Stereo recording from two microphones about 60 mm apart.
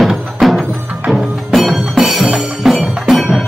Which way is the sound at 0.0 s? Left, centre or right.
Centre.